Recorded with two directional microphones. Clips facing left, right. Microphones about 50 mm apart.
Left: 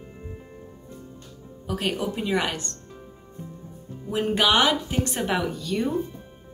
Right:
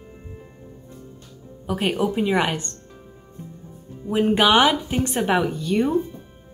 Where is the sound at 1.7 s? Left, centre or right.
Centre.